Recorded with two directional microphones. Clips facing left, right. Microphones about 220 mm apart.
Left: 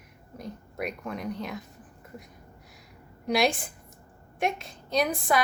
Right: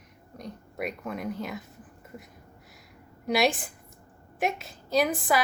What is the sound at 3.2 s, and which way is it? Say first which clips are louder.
A woman's voice: even; centre (ahead or behind).